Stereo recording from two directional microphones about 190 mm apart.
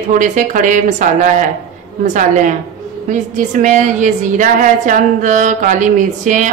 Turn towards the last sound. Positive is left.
turn(degrees=-40)  # may be behind; listen again after turning